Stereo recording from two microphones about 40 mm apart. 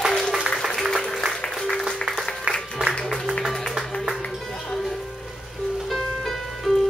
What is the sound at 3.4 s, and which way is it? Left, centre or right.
Music, centre.